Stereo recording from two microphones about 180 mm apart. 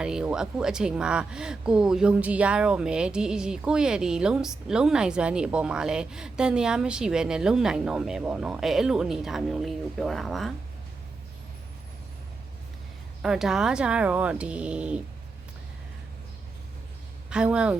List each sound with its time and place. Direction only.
0.0 s speech: 5° right (ahead or behind)
13.2 s speech: 5° right (ahead or behind)
17.2 s speech: 5° right (ahead or behind)